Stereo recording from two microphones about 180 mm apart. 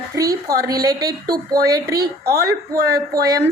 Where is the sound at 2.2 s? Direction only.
60° right (ahead or behind).